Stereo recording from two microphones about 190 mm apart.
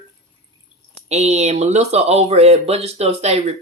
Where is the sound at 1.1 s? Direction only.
35° right (ahead or behind).